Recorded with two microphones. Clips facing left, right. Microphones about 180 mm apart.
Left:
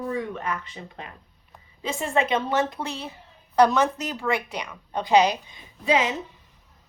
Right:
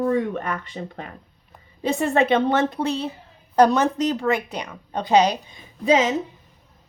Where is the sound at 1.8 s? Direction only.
60° right (ahead or behind).